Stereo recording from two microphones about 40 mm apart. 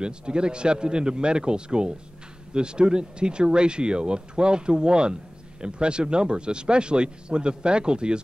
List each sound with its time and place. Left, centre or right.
0.0 s speech: right